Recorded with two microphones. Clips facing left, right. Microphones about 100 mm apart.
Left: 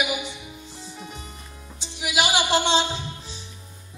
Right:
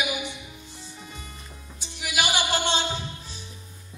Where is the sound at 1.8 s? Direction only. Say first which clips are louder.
Left 3 dB; 20° left (ahead or behind).